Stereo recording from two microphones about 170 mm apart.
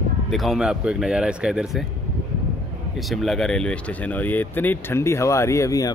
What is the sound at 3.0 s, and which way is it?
Speech, centre (ahead or behind).